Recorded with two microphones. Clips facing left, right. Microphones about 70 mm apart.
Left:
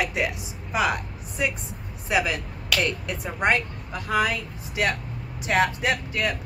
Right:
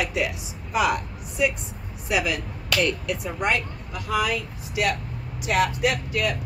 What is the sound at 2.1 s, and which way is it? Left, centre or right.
Speech, left.